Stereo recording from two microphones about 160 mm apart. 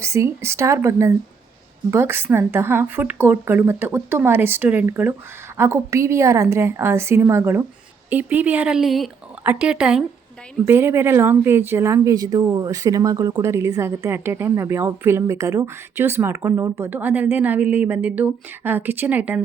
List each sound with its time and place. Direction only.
0.0 s speech: 20° right (ahead or behind)